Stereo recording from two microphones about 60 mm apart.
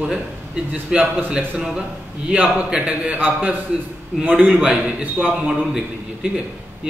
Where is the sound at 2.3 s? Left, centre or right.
Centre.